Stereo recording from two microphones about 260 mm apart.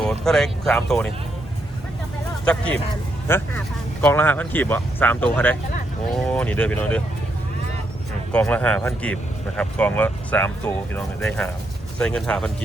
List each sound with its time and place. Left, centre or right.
0.0 s speech: centre
2.4 s speech: centre
8.3 s speech: centre